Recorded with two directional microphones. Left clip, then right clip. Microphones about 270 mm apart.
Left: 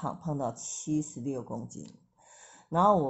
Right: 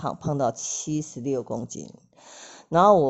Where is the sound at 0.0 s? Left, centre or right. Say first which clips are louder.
Right 8 dB; right.